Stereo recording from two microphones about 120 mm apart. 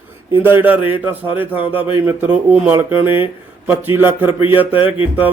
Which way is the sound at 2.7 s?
20° right (ahead or behind).